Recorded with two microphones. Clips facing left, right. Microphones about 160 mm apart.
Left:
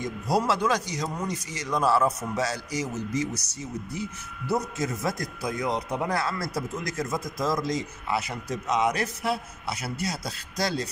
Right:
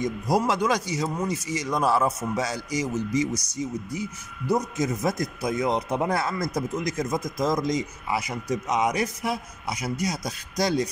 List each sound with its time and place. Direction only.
0.0 s speech: 15° right (ahead or behind)